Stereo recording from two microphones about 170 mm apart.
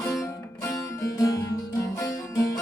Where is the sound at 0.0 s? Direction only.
15° left (ahead or behind).